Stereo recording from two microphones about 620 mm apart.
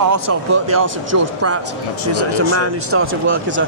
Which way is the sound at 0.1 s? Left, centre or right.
Right.